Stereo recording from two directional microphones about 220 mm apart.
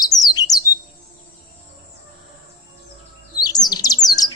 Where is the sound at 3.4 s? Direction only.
20° left (ahead or behind).